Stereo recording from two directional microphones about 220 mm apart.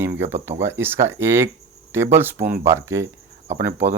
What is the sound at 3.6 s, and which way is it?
Speech, 50° right (ahead or behind).